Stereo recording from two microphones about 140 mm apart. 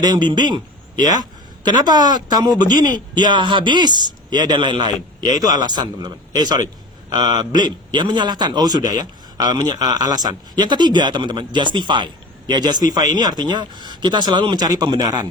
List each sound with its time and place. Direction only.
0.0 s a man's voice: 30° right (ahead or behind)